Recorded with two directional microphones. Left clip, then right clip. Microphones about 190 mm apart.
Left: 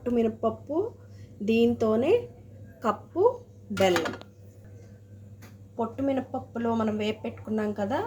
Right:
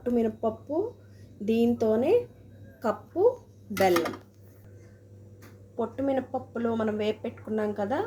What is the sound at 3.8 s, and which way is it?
Speech, 25° left (ahead or behind).